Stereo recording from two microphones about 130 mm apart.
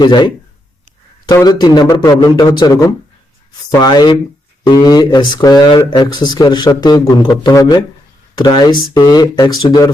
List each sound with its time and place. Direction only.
0.0 s speech: 35° left (ahead or behind)